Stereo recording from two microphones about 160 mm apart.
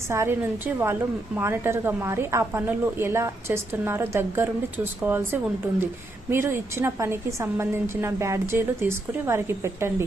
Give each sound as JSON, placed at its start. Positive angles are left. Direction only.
{"t": 0.1, "sound": "a woman's voice", "side_deg": -15}